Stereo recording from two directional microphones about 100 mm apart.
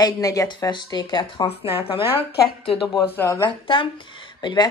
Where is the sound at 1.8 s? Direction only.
65° left (ahead or behind).